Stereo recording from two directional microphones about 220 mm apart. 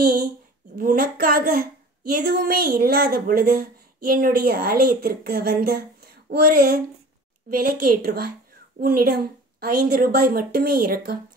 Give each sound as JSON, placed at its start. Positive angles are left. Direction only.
{"t": 0.7, "sound": "a woman's voice", "side_deg": -40}